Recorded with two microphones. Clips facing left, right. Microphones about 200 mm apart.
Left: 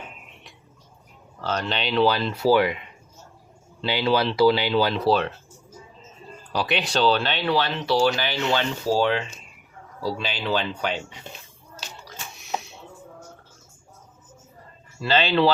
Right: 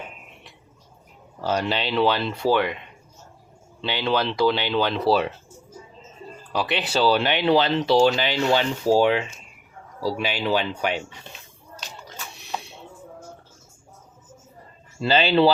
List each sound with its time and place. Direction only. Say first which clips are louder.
1.4 s speech: right 3 dB; 10° right (ahead or behind); by 2.7 s 5° left (ahead or behind)
3.8 s speech: left 2 dB; 5° left (ahead or behind)
6.5 s speech: even; centre (ahead or behind)
15.1 s speech: right 2 dB; 10° right (ahead or behind)